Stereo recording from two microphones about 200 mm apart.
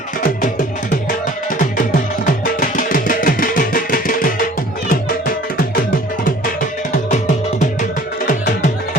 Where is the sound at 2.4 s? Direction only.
45° left (ahead or behind).